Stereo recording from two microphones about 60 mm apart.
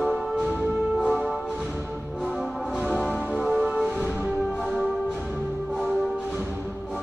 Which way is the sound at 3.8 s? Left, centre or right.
Centre.